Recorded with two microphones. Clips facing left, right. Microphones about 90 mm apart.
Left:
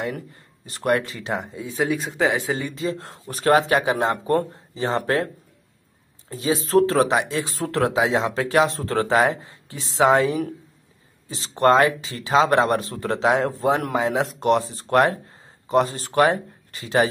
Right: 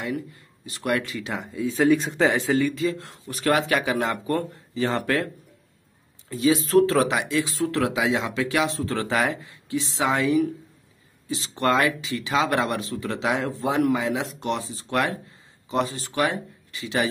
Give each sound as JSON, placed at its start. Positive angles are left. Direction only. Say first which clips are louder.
{"t": 0.0, "sound": "speech", "louder": "left 1 dB", "side_deg": 40}
{"t": 1.6, "sound": "speech", "louder": "right 5 dB", "side_deg": 20}
{"t": 1.9, "sound": "speech", "louder": "right 3 dB", "side_deg": 5}